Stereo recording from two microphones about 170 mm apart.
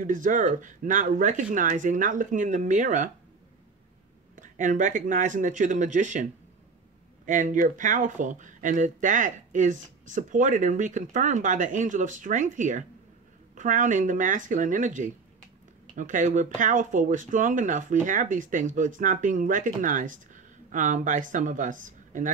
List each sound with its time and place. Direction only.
0.0 s speech: 50° right (ahead or behind)
4.4 s speech: 50° right (ahead or behind)
7.2 s speech: 50° right (ahead or behind)